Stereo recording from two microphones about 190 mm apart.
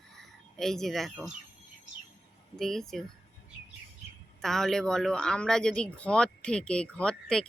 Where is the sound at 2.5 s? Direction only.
Centre (ahead or behind).